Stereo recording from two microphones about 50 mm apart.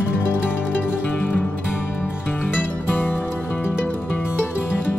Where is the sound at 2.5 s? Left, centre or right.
Left.